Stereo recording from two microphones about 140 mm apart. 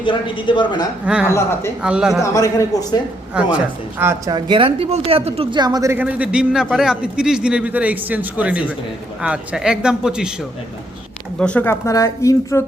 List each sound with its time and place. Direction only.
0.0 s speech: 35° left (ahead or behind)
1.0 s a man's voice: 5° right (ahead or behind)
2.2 s a woman's voice: 25° left (ahead or behind)
3.3 s a man's voice: 5° right (ahead or behind)
4.3 s speech: 30° right (ahead or behind)
5.5 s speech: 30° right (ahead or behind)
6.0 s a man's voice: 10° right (ahead or behind)
11.3 s a woman's voice: 10° left (ahead or behind)